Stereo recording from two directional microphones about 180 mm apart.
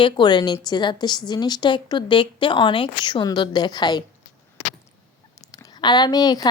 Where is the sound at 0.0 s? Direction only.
25° left (ahead or behind).